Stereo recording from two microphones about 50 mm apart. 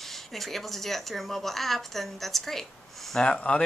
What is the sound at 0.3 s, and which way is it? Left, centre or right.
A woman's voice, centre.